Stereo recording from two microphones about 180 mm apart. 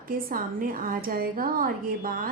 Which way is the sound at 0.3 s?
55° right (ahead or behind).